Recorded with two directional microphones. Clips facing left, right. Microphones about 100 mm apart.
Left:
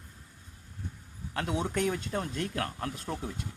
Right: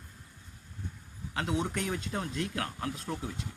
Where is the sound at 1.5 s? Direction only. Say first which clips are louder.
Left 3 dB; 45° left (ahead or behind).